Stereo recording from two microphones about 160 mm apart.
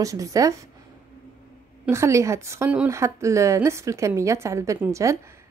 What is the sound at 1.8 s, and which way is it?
A woman's voice, 15° right (ahead or behind).